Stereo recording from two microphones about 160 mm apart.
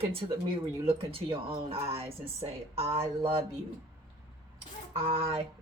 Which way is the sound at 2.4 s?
40° right (ahead or behind).